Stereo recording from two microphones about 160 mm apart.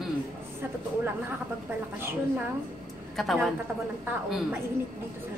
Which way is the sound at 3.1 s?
Centre (ahead or behind).